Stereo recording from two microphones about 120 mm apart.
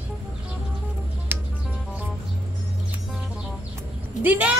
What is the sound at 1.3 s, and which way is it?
Music, 15° right (ahead or behind).